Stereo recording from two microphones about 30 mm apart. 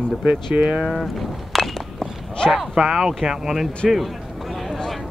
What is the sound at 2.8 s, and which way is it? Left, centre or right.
Speech, centre.